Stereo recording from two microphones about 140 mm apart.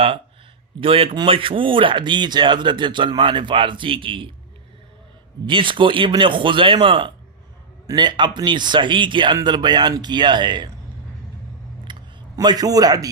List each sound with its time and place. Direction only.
0.8 s speech: 40° right (ahead or behind)
5.5 s speech: 35° right (ahead or behind)
11.9 s a sound: 30° right (ahead or behind)